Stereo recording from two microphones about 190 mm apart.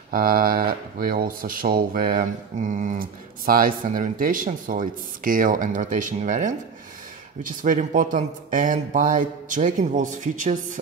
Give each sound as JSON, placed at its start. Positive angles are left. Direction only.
{"t": 0.1, "sound": "speech", "side_deg": -50}